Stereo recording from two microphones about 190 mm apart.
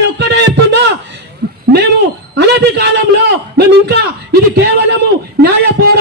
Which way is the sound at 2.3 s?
60° right (ahead or behind).